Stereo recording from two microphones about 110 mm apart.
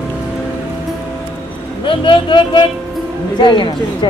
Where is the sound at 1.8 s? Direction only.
50° left (ahead or behind).